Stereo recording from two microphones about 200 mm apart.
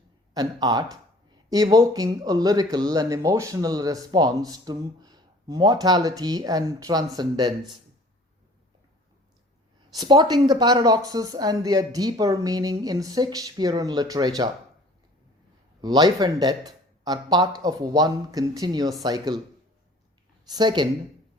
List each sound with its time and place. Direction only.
0.3 s speech: 20° right (ahead or behind)
10.0 s speech: 20° right (ahead or behind)
15.8 s speech: 20° right (ahead or behind)
20.5 s speech: 20° right (ahead or behind)